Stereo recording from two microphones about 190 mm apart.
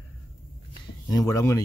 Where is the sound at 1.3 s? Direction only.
15° left (ahead or behind).